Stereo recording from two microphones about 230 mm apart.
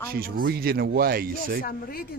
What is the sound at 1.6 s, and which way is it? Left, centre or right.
Speech, left.